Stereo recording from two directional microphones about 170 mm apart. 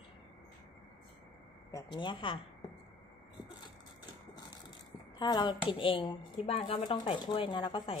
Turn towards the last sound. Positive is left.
turn(degrees=30)  # may be behind; listen again after turning